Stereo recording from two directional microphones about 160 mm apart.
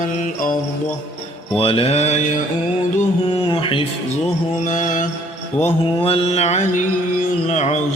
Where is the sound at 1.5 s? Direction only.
35° left (ahead or behind).